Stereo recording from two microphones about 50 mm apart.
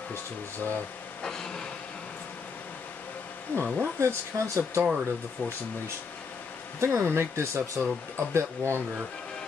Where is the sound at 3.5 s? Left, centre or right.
Left.